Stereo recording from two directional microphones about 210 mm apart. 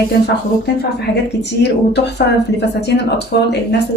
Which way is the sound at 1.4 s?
55° left (ahead or behind).